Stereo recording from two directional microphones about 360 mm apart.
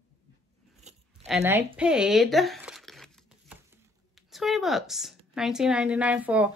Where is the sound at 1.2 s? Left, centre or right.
Centre.